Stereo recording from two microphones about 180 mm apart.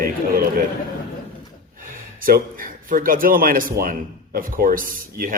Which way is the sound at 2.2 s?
50° right (ahead or behind).